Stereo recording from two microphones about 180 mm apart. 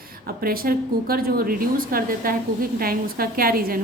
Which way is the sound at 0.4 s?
55° right (ahead or behind).